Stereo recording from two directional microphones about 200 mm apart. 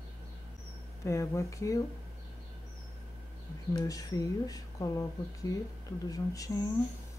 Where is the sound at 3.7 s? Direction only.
20° left (ahead or behind).